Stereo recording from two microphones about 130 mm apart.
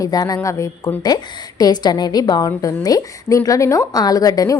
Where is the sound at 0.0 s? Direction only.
30° left (ahead or behind).